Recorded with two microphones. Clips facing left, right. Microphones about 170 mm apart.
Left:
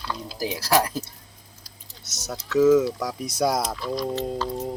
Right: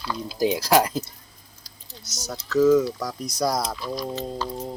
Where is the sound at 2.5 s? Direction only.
5° left (ahead or behind).